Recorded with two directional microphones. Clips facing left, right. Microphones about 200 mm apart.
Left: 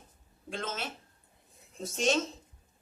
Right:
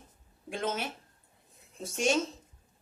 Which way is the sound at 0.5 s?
15° right (ahead or behind).